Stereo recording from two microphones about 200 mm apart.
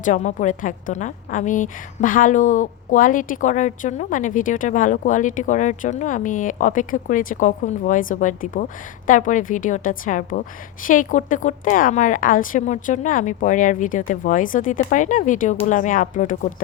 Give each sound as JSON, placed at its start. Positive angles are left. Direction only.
{"t": 0.0, "sound": "a woman's voice", "side_deg": 40}